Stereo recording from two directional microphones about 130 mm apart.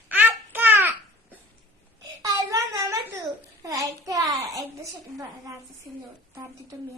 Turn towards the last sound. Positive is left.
turn(degrees=-25)  # may be behind; listen again after turning